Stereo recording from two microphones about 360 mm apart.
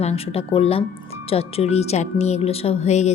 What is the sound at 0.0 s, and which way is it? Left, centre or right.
Speech, centre.